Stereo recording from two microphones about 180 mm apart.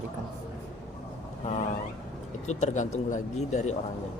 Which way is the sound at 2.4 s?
40° left (ahead or behind).